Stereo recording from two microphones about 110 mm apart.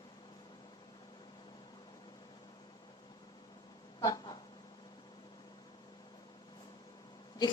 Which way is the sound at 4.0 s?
35° left (ahead or behind).